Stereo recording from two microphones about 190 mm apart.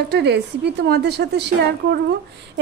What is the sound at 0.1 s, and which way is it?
A woman's voice, 65° right (ahead or behind).